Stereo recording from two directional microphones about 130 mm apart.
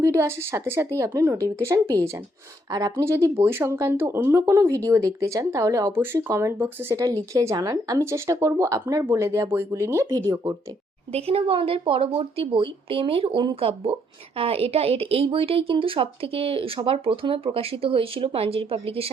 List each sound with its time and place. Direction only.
0.0 s speech: 20° right (ahead or behind)
11.1 s a woman's voice: 50° right (ahead or behind)